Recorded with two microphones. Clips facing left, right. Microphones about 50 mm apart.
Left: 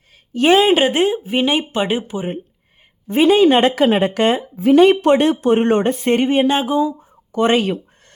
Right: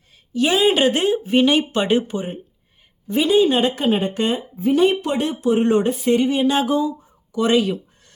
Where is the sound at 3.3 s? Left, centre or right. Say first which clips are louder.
Left 2 dB; left.